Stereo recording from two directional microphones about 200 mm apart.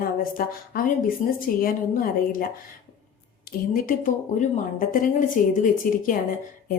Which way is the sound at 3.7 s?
40° left (ahead or behind).